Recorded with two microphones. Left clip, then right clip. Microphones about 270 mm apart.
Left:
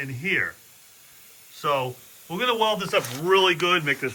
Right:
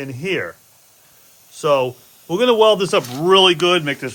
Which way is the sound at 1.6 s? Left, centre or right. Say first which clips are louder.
Right 8 dB; centre.